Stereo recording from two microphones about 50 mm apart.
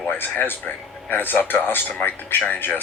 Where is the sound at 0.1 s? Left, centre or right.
Left.